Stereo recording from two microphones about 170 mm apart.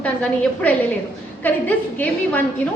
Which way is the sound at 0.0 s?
10° left (ahead or behind).